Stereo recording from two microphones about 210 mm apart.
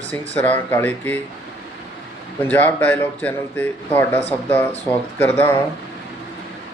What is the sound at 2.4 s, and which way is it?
Speech, 10° left (ahead or behind).